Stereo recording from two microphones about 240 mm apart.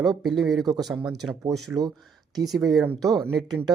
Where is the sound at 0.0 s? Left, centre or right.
Centre.